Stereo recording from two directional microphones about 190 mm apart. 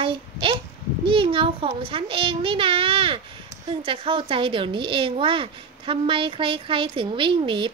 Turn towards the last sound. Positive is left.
turn(degrees=-25)  # may be behind; listen again after turning